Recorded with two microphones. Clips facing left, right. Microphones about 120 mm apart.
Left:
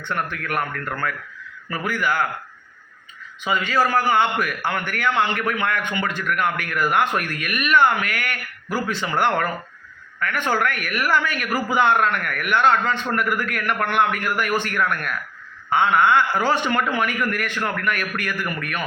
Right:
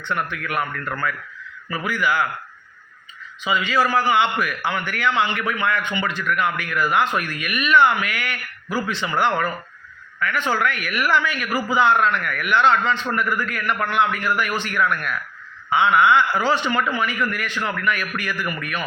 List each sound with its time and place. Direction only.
0.0 s a man's voice: 45° left (ahead or behind)
3.4 s a man's voice: 50° left (ahead or behind)